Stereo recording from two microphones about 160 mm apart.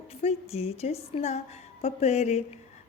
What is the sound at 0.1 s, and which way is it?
A woman's voice, 40° left (ahead or behind).